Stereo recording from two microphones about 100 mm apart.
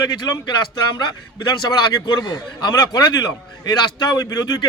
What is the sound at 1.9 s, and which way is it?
A man's voice, 40° left (ahead or behind).